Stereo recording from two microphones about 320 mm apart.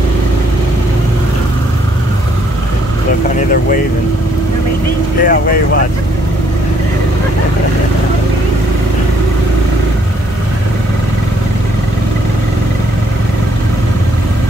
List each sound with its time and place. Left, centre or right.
5.2 s speech: left